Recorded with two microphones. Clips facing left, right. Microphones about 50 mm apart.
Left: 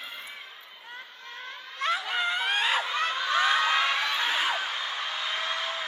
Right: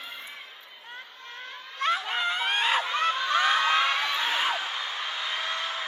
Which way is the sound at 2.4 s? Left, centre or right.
Right.